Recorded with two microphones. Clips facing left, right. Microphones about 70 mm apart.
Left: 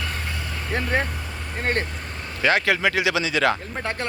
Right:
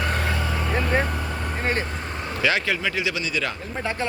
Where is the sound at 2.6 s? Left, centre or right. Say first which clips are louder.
Left 4 dB; left.